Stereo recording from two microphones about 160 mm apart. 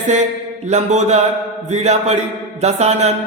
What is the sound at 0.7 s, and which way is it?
A man's voice, 45° right (ahead or behind).